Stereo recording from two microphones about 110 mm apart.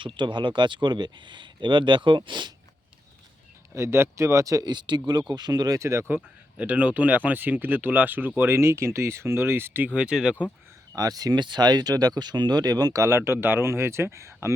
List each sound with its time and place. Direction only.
0.0 s speech: 45° right (ahead or behind)
3.8 s speech: 25° right (ahead or behind)
6.6 s speech: 15° right (ahead or behind)
10.9 s speech: 35° right (ahead or behind)